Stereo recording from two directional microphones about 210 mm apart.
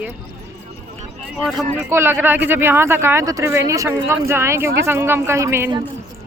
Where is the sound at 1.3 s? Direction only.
Centre (ahead or behind).